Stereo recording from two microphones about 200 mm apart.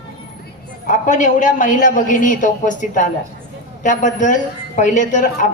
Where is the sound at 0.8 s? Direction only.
40° left (ahead or behind).